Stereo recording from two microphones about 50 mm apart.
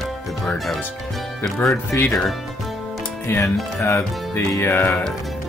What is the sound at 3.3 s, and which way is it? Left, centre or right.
Speech, left.